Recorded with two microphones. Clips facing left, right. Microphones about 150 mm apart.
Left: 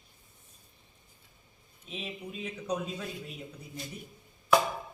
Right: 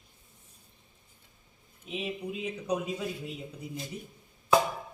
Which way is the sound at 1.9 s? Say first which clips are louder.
Right 5 dB; 15° right (ahead or behind).